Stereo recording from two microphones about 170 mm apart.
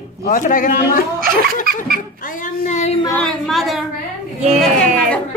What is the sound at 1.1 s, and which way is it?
Laughter, 60° right (ahead or behind).